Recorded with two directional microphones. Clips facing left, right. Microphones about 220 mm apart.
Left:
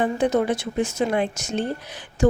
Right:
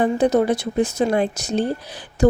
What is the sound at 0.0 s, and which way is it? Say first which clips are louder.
A woman's voice: right 4 dB; 35° right (ahead or behind).